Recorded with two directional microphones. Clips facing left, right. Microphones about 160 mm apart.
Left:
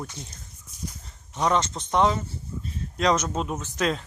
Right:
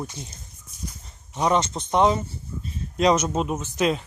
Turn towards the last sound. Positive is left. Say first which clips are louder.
# right 3 dB
turn(degrees=-15)  # may be behind; listen again after turning